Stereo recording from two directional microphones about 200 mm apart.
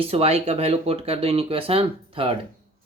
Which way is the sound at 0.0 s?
30° right (ahead or behind).